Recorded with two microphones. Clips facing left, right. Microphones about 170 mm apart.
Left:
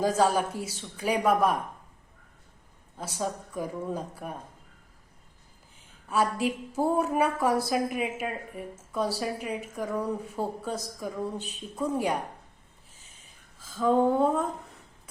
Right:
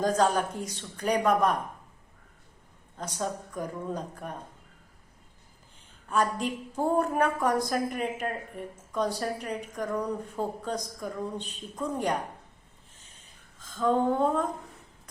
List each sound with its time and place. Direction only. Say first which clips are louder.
0.0 s a woman's voice: left 1 dB; 5° left (ahead or behind)
3.0 s a woman's voice: even; 5° left (ahead or behind)
6.1 s a woman's voice: left 1 dB; 5° left (ahead or behind)
13.6 s a woman's voice: left 2 dB; 5° left (ahead or behind)